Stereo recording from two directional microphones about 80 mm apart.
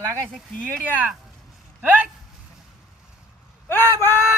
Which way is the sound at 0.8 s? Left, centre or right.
Right.